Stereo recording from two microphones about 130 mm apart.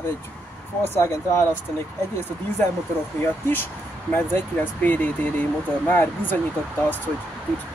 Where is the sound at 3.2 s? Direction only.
20° left (ahead or behind).